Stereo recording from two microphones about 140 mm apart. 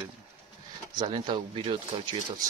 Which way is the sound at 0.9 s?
30° right (ahead or behind).